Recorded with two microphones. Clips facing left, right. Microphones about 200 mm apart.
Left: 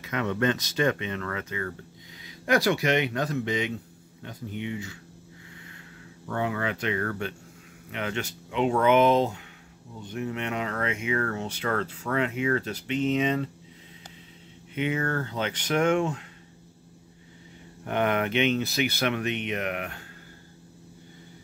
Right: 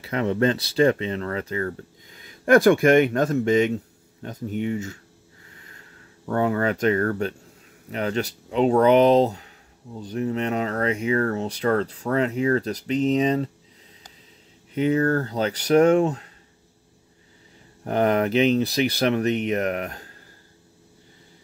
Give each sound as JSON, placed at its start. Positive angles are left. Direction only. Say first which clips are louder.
{"t": 0.0, "sound": "speech", "louder": "right 5 dB", "side_deg": -30}
{"t": 6.2, "sound": "speech", "louder": "right 7 dB", "side_deg": -45}
{"t": 14.7, "sound": "speech", "louder": "right 7 dB", "side_deg": -40}
{"t": 17.8, "sound": "speech", "louder": "right 5 dB", "side_deg": -35}